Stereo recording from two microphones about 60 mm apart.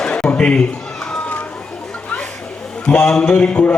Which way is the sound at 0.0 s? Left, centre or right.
Centre.